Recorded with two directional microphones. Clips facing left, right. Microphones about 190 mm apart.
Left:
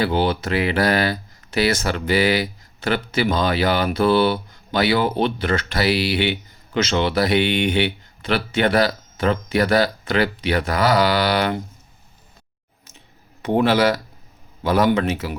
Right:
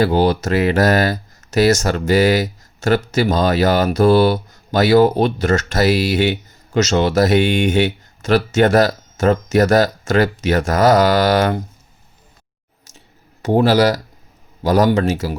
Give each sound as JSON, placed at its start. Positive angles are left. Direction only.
{"t": 0.0, "sound": "speech", "side_deg": -40}
{"t": 13.4, "sound": "a man's voice", "side_deg": -40}